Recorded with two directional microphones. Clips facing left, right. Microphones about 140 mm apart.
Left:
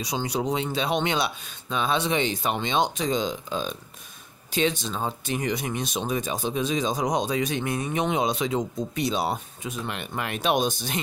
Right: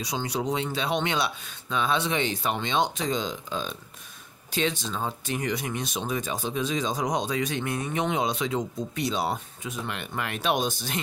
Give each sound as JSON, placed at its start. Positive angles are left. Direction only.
{"t": 0.0, "sound": "speech", "side_deg": 15}